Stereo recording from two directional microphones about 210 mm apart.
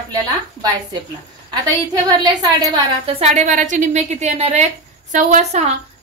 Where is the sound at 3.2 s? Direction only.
35° right (ahead or behind).